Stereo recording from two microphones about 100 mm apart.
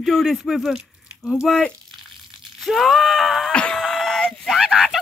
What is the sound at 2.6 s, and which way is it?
Speech, centre (ahead or behind).